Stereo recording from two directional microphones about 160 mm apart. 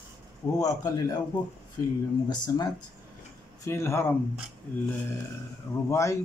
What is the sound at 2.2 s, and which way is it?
Speech, 25° left (ahead or behind).